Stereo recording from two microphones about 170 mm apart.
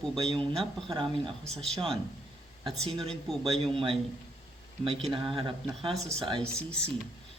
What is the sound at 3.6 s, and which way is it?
A man's voice, 35° right (ahead or behind).